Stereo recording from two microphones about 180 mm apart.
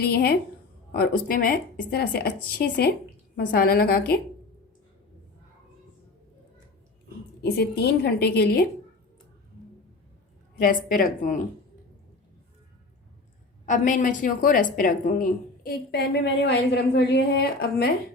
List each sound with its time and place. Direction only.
0.0 s a woman's voice: 60° left (ahead or behind)
7.4 s a woman's voice: 65° left (ahead or behind)
10.6 s a woman's voice: 50° left (ahead or behind)
13.7 s a woman's voice: 45° left (ahead or behind)